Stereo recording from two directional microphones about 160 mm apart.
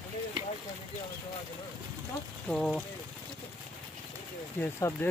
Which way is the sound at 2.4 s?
5° left (ahead or behind).